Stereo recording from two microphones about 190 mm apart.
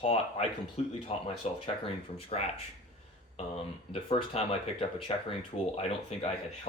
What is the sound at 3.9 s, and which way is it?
Speech, 30° left (ahead or behind).